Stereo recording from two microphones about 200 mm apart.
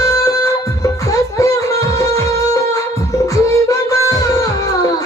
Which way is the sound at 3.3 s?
15° left (ahead or behind).